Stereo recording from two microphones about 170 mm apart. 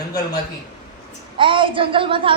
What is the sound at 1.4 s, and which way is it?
Speech, 30° right (ahead or behind).